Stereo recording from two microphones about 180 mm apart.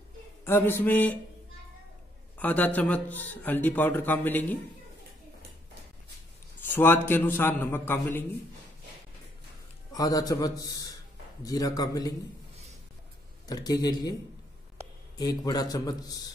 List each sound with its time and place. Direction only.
0.5 s a man's voice: 10° left (ahead or behind)
2.3 s a man's voice: 10° left (ahead or behind)
6.7 s a man's voice: 10° left (ahead or behind)
9.9 s a man's voice: 20° left (ahead or behind)
13.5 s a man's voice: 20° left (ahead or behind)
15.1 s a man's voice: 20° left (ahead or behind)